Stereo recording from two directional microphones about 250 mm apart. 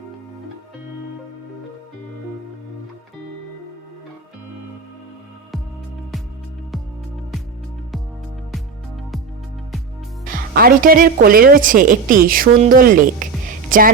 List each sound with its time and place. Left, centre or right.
10.5 s a woman's voice: right